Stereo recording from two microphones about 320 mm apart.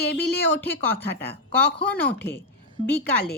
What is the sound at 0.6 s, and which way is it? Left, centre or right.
A woman's voice, centre.